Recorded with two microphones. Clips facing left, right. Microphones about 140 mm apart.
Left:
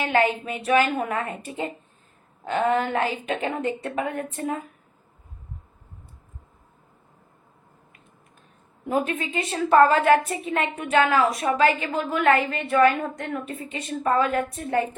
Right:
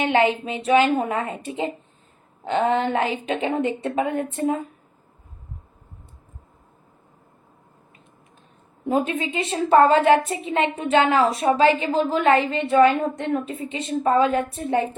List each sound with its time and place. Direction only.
0.0 s a woman's voice: 25° right (ahead or behind)
8.9 s a woman's voice: 25° right (ahead or behind)